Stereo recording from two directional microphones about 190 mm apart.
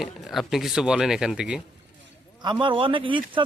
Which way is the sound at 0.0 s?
Centre (ahead or behind).